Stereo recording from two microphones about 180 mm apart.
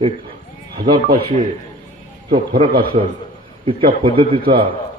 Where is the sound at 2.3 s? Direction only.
30° right (ahead or behind).